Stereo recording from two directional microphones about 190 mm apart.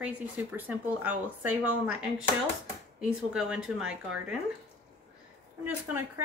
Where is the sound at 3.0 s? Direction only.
5° right (ahead or behind).